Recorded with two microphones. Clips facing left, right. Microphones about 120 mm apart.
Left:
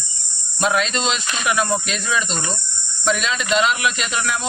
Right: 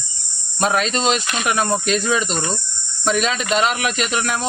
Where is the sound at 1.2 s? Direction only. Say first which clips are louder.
Right 1 dB; 50° right (ahead or behind).